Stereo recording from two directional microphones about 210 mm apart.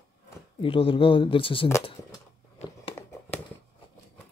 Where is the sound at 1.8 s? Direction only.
20° left (ahead or behind).